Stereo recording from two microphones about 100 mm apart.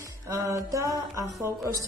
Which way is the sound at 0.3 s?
35° right (ahead or behind).